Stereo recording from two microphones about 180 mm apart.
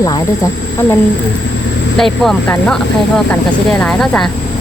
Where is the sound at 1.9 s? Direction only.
Centre (ahead or behind).